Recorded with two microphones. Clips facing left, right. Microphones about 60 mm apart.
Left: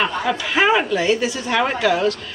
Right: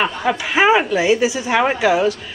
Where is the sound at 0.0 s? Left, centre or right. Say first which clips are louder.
Right 1 dB; right.